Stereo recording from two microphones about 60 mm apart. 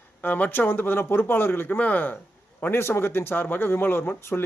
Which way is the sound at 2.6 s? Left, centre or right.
Left.